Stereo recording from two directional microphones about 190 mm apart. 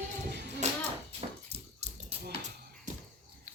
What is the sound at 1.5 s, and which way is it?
Dog, 35° right (ahead or behind).